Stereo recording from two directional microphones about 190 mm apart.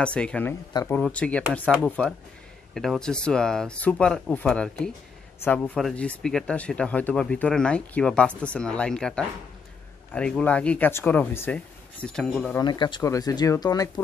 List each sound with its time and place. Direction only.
0.0 s speech: 5° left (ahead or behind)
12.5 s speech: 20° left (ahead or behind)